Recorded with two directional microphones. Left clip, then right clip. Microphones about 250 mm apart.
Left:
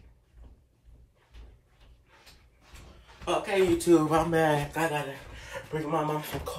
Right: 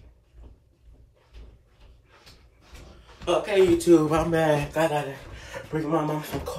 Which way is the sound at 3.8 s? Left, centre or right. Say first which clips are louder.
Right 3 dB; left.